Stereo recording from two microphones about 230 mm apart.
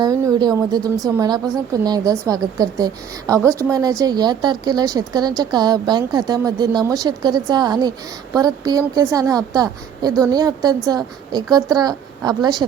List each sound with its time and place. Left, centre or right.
0.0 s a woman's voice: centre